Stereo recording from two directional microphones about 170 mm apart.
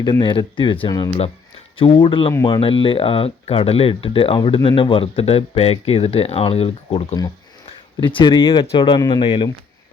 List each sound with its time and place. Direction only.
0.0 s speech: 25° left (ahead or behind)